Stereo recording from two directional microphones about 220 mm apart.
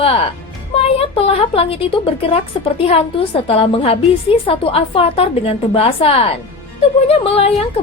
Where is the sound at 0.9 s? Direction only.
25° left (ahead or behind).